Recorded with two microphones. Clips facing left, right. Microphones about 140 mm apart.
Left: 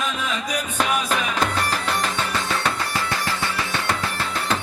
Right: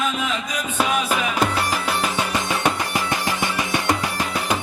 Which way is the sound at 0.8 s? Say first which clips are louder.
Right 2 dB; 10° right (ahead or behind).